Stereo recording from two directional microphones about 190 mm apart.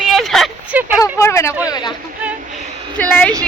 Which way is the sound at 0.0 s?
Centre (ahead or behind).